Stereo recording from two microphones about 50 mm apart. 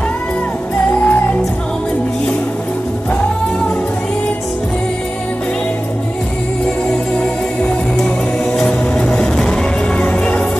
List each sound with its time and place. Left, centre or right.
1.0 s music: left
7.2 s music: left